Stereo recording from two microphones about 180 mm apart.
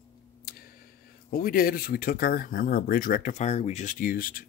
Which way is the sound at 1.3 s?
55° left (ahead or behind).